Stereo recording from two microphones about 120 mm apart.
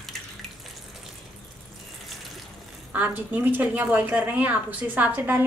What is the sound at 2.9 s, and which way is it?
A woman's voice, 15° right (ahead or behind).